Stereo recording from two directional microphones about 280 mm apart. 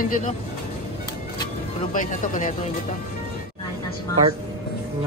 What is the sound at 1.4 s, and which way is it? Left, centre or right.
Music, left.